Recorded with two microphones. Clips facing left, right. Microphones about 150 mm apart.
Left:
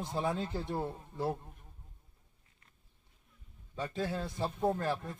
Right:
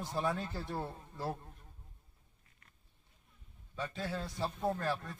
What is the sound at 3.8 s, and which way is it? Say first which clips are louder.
A man's voice: left 3 dB; 15° left (ahead or behind).